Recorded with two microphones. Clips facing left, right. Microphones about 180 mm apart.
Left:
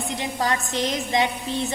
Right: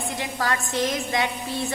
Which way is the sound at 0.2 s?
20° left (ahead or behind).